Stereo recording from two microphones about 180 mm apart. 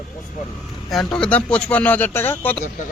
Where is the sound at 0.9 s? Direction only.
5° left (ahead or behind).